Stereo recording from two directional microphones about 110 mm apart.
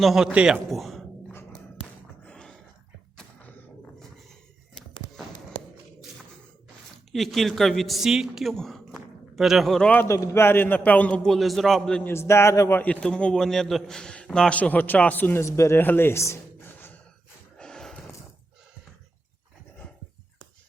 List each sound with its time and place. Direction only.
0.0 s a man's voice: 5° right (ahead or behind)
2.2 s dog: 5° left (ahead or behind)
7.1 s a woman's voice: centre (ahead or behind)
9.9 s a man's voice: 20° left (ahead or behind)
12.0 s a man's voice: 25° left (ahead or behind)
17.6 s snort: 5° left (ahead or behind)